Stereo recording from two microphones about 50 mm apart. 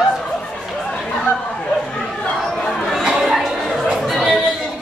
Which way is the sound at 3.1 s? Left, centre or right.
Centre.